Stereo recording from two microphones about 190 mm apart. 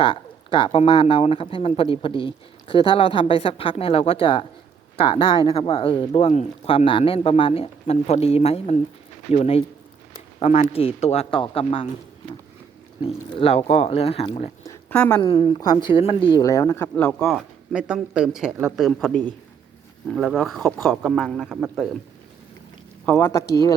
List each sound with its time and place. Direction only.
0.0 s speech: 25° left (ahead or behind)
13.0 s speech: 30° left (ahead or behind)
14.6 s a sound: 15° left (ahead or behind)
14.9 s a woman's voice: 5° left (ahead or behind)
15.2 s a woman's voice: 25° left (ahead or behind); by 21.8 s 5° right (ahead or behind)
23.0 s a woman's voice: 10° left (ahead or behind)